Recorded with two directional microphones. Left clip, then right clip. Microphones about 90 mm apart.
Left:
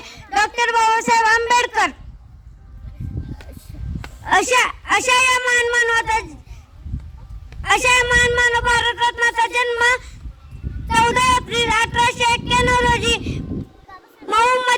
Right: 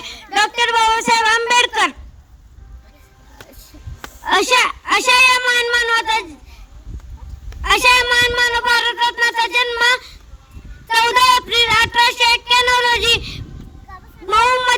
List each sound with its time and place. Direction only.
0.0 s a sound: 30° right (ahead or behind)
0.3 s speech: 25° right (ahead or behind)
4.3 s speech: 15° right (ahead or behind)
7.7 s speech: 15° right (ahead or behind)
14.3 s cat: 20° right (ahead or behind)